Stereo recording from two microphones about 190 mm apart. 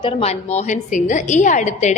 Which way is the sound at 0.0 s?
30° left (ahead or behind).